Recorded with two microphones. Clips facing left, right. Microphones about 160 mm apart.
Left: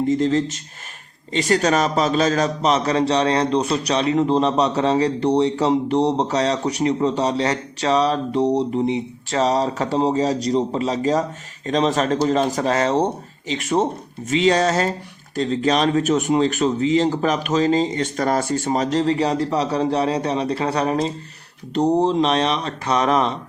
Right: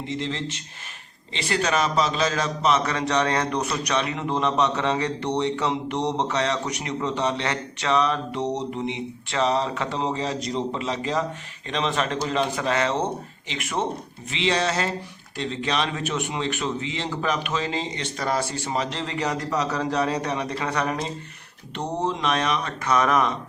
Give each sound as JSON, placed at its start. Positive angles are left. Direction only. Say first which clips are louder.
{"t": 0.0, "sound": "a man's voice", "louder": "left 11 dB", "side_deg": 45}